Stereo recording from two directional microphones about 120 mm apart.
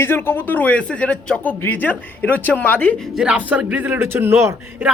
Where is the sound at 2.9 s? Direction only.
Centre (ahead or behind); by 4.6 s 20° right (ahead or behind).